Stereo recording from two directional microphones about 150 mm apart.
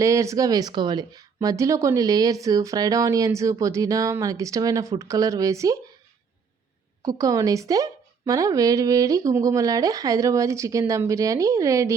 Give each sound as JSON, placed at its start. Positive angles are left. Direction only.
{"t": 0.0, "sound": "speech", "side_deg": -20}
{"t": 7.0, "sound": "speech", "side_deg": -25}